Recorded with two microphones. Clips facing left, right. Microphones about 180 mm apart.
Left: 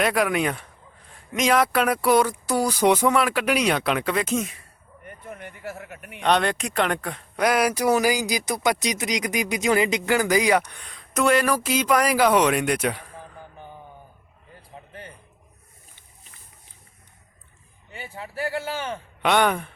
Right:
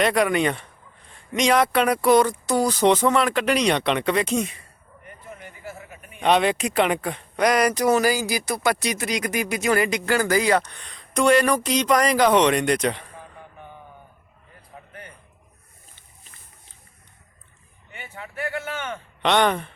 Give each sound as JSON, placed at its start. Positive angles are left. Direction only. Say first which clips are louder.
{"t": 0.0, "sound": "a man's voice", "louder": "right 2 dB", "side_deg": 5}
{"t": 5.0, "sound": "a man's voice", "louder": "left 3 dB", "side_deg": 55}
{"t": 6.2, "sound": "speech", "louder": "right 2 dB", "side_deg": 0}
{"t": 17.9, "sound": "speech", "louder": "left 2 dB", "side_deg": 35}
{"t": 19.2, "sound": "speech", "louder": "right 1 dB", "side_deg": 5}